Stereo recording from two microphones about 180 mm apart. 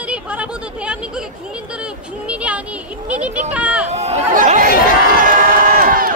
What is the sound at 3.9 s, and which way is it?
Chatter, 35° right (ahead or behind).